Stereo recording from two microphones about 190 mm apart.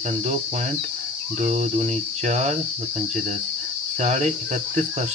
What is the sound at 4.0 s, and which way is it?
Speech, 35° right (ahead or behind).